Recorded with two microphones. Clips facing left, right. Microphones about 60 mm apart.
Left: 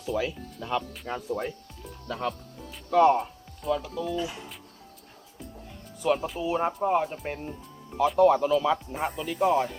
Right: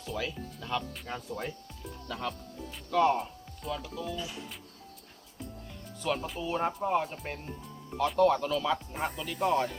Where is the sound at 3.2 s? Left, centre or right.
Centre.